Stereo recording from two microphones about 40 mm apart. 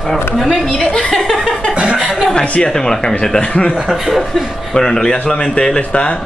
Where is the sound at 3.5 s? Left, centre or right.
Left.